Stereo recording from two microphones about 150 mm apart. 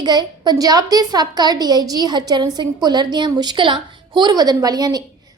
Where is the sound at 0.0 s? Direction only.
30° right (ahead or behind).